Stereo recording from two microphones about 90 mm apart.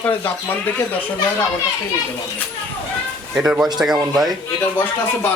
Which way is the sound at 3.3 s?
10° right (ahead or behind).